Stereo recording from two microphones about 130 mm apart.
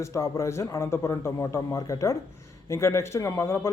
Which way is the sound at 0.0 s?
20° left (ahead or behind).